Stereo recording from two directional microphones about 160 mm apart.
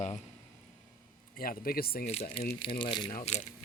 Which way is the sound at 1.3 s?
65° left (ahead or behind).